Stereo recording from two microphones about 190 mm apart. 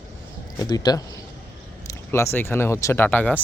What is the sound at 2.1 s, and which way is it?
Speech, 10° left (ahead or behind).